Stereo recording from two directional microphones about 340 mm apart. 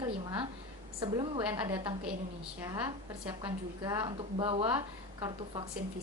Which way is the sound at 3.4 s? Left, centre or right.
Centre.